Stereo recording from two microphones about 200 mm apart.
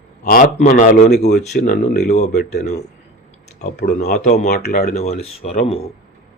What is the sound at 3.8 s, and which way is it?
Speech, 50° left (ahead or behind).